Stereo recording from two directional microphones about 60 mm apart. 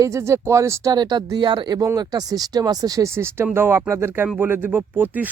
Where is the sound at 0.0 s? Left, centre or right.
Right.